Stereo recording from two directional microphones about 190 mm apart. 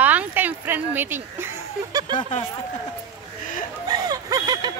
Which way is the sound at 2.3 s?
40° left (ahead or behind).